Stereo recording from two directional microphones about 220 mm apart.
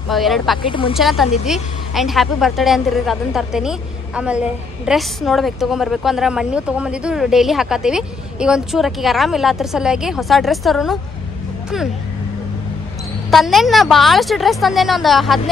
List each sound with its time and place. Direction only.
0.1 s a woman's voice: centre (ahead or behind)
0.6 s speech: 25° left (ahead or behind)
0.9 s a woman's voice: centre (ahead or behind)
13.3 s a woman's voice: centre (ahead or behind)